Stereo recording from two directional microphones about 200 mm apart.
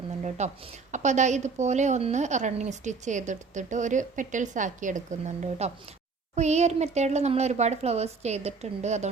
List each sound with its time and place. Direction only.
0.3 s a woman's voice: 35° right (ahead or behind)